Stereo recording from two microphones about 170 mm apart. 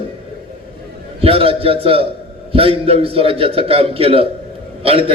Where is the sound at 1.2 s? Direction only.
35° right (ahead or behind).